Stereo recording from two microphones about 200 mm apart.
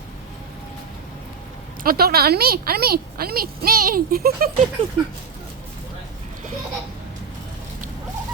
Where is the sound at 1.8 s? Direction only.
50° right (ahead or behind).